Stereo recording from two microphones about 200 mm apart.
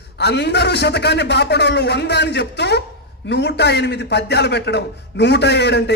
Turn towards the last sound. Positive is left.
turn(degrees=60)  # may be behind; listen again after turning